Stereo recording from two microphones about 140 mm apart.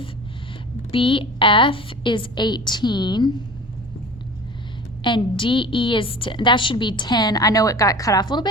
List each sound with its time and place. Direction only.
0.9 s a woman's voice: 40° left (ahead or behind)
5.0 s a woman's voice: 35° left (ahead or behind)